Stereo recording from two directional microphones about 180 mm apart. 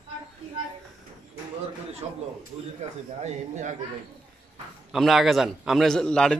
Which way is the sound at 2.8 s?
40° right (ahead or behind).